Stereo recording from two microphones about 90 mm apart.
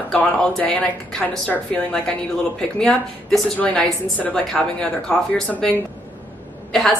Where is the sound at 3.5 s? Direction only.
15° left (ahead or behind).